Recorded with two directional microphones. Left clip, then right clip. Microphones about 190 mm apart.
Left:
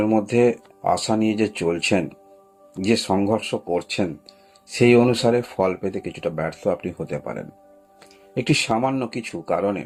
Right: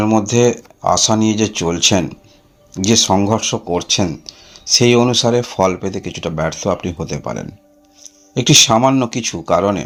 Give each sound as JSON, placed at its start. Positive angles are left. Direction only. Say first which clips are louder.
{"t": 0.0, "sound": "speech", "louder": "right 5 dB", "side_deg": -35}
{"t": 8.4, "sound": "speech", "louder": "right 11 dB", "side_deg": -45}